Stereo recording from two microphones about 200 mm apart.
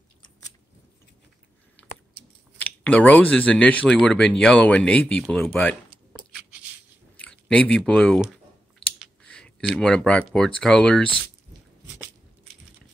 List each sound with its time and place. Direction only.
2.6 s speech: 10° left (ahead or behind)
7.2 s speech: 5° left (ahead or behind)